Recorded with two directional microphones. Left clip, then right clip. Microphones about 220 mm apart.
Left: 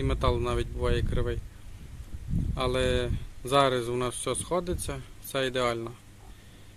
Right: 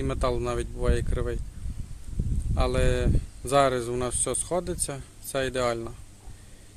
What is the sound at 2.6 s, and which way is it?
Speech, 5° right (ahead or behind).